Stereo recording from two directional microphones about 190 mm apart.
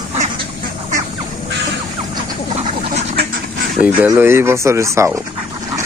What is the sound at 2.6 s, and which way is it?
Duck, 35° right (ahead or behind).